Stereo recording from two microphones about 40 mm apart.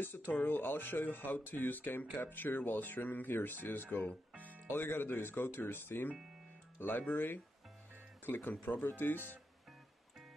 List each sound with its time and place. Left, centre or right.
0.0 s speech: left
4.4 s music: right
4.7 s speech: left
6.8 s speech: left